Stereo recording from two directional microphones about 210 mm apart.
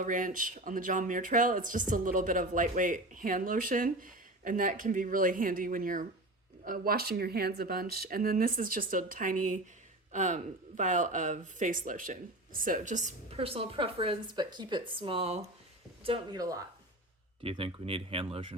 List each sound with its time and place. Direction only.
0.0 s speech: 40° right (ahead or behind)